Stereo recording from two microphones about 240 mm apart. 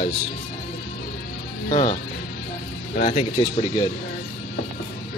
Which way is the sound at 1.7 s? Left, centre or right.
Left.